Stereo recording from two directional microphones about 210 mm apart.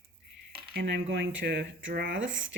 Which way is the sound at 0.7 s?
55° right (ahead or behind).